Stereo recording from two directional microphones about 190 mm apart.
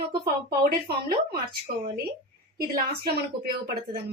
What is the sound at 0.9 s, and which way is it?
Speech, 55° right (ahead or behind).